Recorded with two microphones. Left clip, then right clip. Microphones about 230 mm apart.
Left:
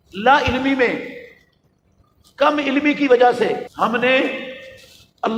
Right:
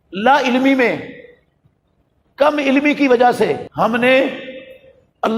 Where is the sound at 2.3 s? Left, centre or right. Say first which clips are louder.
Right 3 dB; right.